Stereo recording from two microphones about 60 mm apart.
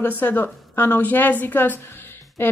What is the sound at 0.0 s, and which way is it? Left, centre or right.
A woman's voice, left.